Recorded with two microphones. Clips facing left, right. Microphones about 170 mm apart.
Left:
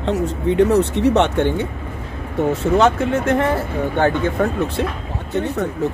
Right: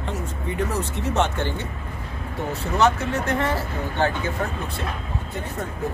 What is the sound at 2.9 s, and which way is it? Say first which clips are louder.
Speech: left 7 dB; 50° left (ahead or behind).